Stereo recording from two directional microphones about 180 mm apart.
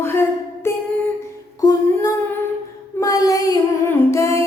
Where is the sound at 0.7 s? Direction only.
15° left (ahead or behind).